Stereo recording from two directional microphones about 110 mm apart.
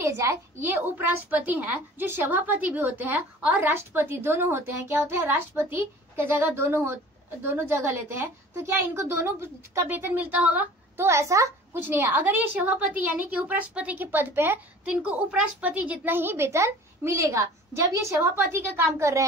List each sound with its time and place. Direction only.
0.0 s a woman's voice: 30° right (ahead or behind)
11.1 s a woman's voice: 25° right (ahead or behind)